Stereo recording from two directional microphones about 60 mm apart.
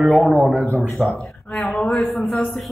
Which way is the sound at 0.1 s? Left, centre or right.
Centre.